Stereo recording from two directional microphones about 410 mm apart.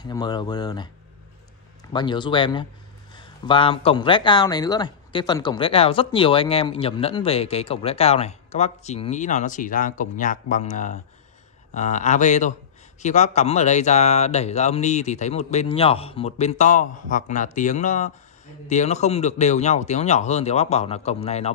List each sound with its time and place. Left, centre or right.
0.0 s speech: centre
1.9 s speech: centre